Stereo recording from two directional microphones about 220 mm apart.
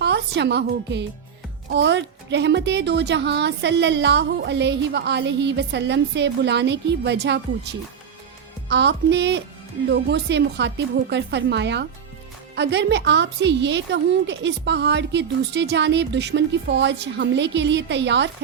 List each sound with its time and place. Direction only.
0.0 s a woman's voice: 50° right (ahead or behind)
8.7 s a woman's voice: 50° right (ahead or behind)